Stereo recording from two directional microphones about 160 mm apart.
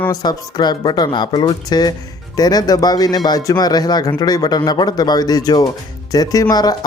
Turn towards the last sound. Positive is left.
turn(degrees=25)  # may be behind; listen again after turning